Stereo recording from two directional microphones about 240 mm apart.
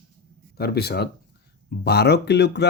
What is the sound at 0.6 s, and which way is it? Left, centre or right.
Speech, left.